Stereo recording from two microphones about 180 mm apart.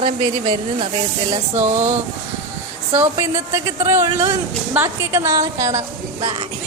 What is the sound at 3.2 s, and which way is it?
A woman's voice, 15° right (ahead or behind).